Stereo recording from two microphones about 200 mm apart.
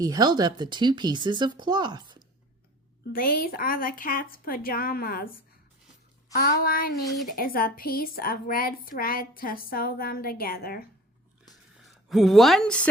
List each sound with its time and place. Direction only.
0.0 s speech: 20° right (ahead or behind)
3.1 s a woman's voice: 50° left (ahead or behind)
6.3 s a woman's voice: 50° left (ahead or behind)
12.0 s speech: centre (ahead or behind)